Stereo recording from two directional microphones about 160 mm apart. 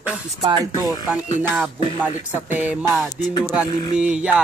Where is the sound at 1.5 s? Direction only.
5° right (ahead or behind).